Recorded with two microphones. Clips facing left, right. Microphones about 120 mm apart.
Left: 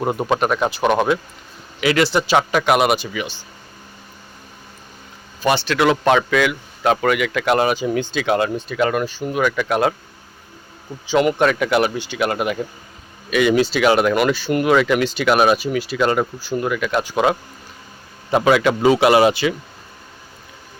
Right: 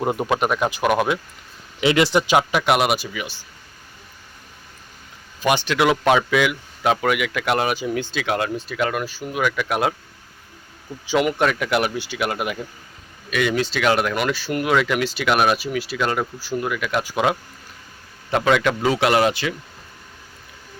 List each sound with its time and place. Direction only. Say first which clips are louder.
0.0 s speech: left 1 dB; 20° left (ahead or behind)
0.3 s speech: left 2 dB; 10° right (ahead or behind)
1.8 s speech: even; 25° right (ahead or behind); by 3.4 s 5° right (ahead or behind)
5.4 s speech: left 2 dB; 15° right (ahead or behind)
11.0 s speech: left 3 dB; 10° right (ahead or behind)
11.3 s speech: left 3 dB; centre (ahead or behind)
18.3 s speech: left 3 dB; 10° left (ahead or behind)